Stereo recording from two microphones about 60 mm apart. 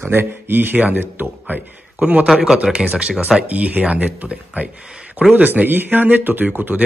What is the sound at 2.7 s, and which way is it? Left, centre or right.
Speech, centre.